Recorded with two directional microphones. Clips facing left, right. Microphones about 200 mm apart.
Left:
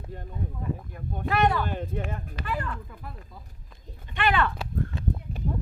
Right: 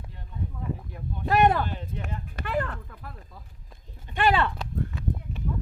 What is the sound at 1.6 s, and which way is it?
Speech, 50° left (ahead or behind).